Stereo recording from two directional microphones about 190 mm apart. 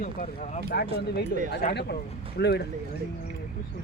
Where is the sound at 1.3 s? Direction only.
60° left (ahead or behind).